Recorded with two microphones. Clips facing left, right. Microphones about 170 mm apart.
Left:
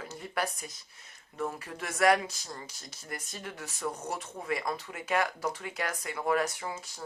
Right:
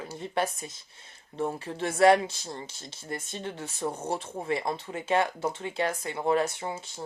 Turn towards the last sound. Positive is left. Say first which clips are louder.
# right 4 dB
turn(degrees=-25)  # may be behind; listen again after turning